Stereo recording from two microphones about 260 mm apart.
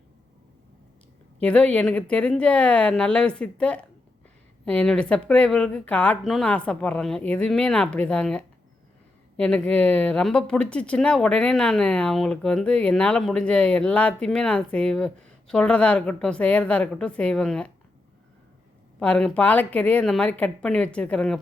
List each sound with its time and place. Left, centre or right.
1.4 s speech: centre
18.9 s speech: centre